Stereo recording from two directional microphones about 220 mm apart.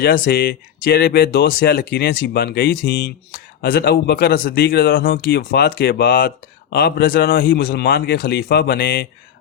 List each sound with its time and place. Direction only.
0.0 s speech: 45° left (ahead or behind)